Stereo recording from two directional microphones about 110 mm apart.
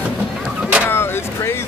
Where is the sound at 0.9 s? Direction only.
20° left (ahead or behind).